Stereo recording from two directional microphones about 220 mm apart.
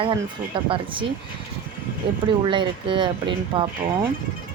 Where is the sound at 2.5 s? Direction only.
20° right (ahead or behind).